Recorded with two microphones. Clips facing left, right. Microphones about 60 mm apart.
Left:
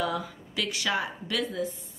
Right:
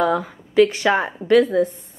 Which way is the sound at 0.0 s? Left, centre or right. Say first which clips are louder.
Right 10 dB; right.